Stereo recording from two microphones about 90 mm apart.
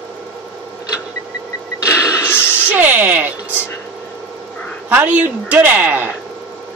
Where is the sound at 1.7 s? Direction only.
35° left (ahead or behind).